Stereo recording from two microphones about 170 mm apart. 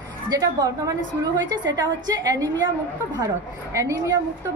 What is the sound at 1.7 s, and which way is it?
Speech, 25° right (ahead or behind).